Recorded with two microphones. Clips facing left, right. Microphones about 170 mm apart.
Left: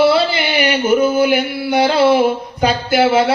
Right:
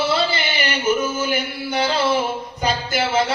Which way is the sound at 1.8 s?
65° left (ahead or behind).